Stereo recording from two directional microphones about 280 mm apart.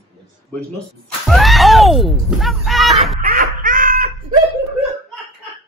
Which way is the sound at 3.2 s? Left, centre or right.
Right.